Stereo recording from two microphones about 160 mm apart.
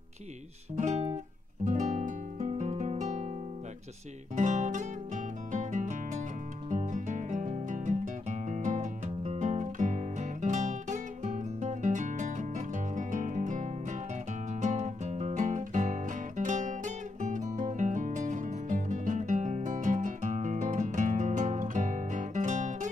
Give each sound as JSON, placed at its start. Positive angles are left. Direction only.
{"t": 0.7, "sound": "guitar", "side_deg": -45}
{"t": 1.6, "sound": "music", "side_deg": -50}
{"t": 4.4, "sound": "music", "side_deg": -50}